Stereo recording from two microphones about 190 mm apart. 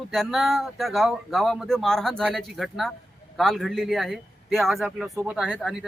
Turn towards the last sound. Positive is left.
turn(degrees=5)  # may be behind; listen again after turning